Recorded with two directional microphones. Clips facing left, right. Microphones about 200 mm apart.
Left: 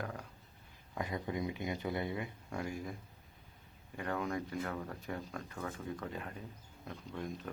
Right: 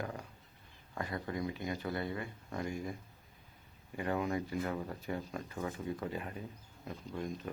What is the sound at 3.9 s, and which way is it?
Speech, 10° right (ahead or behind).